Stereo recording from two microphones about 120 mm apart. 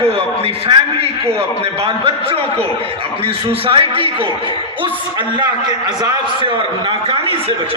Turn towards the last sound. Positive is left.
turn(degrees=-55)  # may be behind; listen again after turning